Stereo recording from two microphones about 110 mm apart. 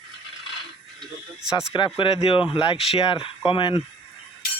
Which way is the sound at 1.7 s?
35° left (ahead or behind).